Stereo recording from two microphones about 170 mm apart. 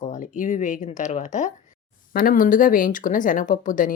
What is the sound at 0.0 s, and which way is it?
Speech, 45° left (ahead or behind).